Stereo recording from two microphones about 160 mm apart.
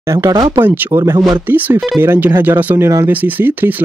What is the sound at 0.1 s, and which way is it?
Speech, 20° right (ahead or behind).